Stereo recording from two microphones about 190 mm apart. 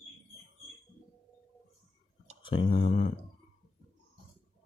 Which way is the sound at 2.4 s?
25° left (ahead or behind).